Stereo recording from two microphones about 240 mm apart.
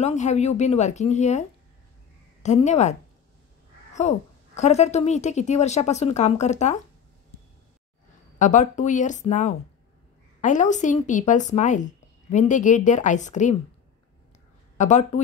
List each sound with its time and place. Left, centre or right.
0.0 s a woman's voice: left
2.4 s a woman's voice: left
4.0 s a woman's voice: left
8.4 s a woman's voice: left
14.8 s a woman's voice: left